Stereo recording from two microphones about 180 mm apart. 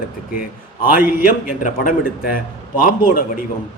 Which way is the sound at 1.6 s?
45° left (ahead or behind).